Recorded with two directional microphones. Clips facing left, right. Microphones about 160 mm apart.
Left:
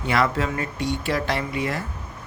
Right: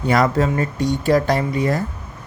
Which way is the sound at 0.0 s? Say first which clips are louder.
Right 5 dB; 40° right (ahead or behind).